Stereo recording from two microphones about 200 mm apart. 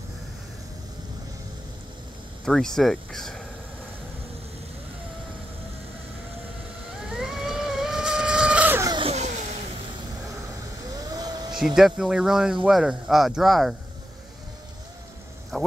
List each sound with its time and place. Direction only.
2.4 s speech: centre (ahead or behind)
7.1 s vehicle: centre (ahead or behind)
8.9 s a sound: 30° right (ahead or behind)
11.0 s a sound: 20° right (ahead or behind)
11.6 s speech: centre (ahead or behind)
15.5 s speech: centre (ahead or behind)